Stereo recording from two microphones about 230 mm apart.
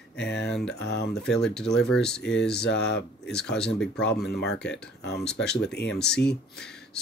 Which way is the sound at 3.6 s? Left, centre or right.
Centre.